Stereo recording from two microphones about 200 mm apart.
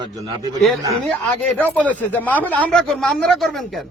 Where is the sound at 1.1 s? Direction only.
5° left (ahead or behind).